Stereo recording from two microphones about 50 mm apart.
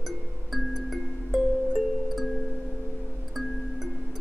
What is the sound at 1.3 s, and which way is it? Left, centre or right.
Music, centre.